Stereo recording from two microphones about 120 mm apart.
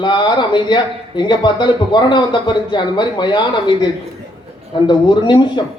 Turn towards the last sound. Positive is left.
turn(degrees=40)  # may be behind; listen again after turning